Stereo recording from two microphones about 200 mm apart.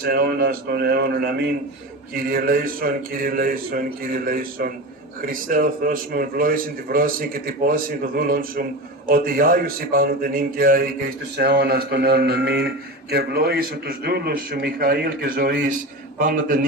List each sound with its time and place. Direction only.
0.0 s a man's voice: 50° right (ahead or behind)